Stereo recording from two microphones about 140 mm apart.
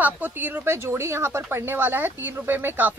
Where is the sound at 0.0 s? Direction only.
15° right (ahead or behind).